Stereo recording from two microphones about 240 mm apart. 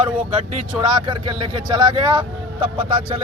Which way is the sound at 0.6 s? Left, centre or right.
Centre.